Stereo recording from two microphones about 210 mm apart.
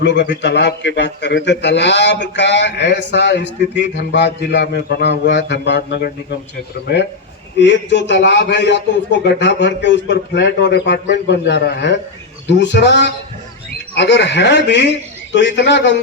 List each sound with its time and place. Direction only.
0.0 s a man's voice: 55° left (ahead or behind)